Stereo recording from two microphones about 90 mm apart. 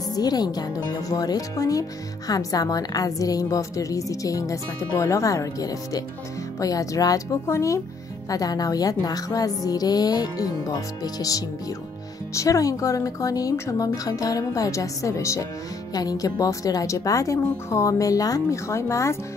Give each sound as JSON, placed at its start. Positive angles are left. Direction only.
{"t": 0.1, "sound": "speech", "side_deg": 45}
{"t": 8.3, "sound": "music", "side_deg": 45}
{"t": 12.4, "sound": "speech", "side_deg": 40}